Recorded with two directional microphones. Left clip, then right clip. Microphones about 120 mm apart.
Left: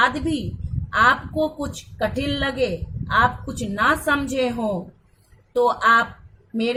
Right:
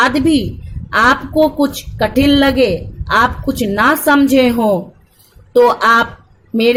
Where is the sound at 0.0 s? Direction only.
60° right (ahead or behind).